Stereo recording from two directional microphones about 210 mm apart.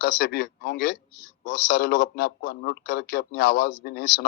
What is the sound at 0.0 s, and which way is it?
A man's voice, 50° left (ahead or behind).